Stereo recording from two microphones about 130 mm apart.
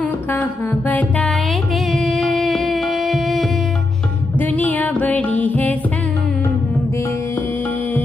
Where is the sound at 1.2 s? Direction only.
Centre (ahead or behind).